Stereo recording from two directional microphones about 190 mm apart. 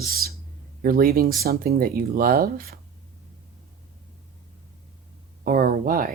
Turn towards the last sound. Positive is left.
turn(degrees=-45)  # may be behind; listen again after turning